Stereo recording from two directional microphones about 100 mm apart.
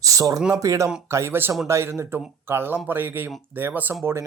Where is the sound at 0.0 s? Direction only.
35° right (ahead or behind).